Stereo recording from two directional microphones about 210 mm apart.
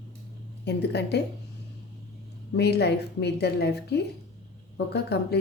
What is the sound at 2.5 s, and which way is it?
A woman's voice, 50° left (ahead or behind).